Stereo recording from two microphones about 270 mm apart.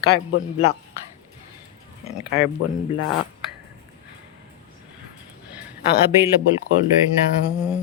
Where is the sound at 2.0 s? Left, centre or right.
Left.